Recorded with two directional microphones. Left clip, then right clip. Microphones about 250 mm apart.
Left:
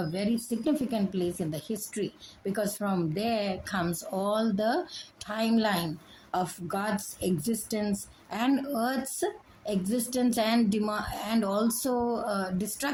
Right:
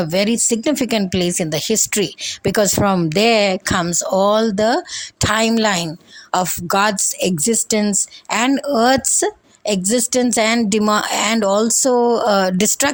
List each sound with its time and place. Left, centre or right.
0.0 s a woman's voice: right